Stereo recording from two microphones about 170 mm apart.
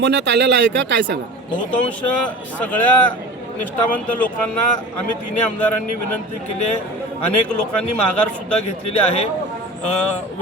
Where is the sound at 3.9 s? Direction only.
10° left (ahead or behind).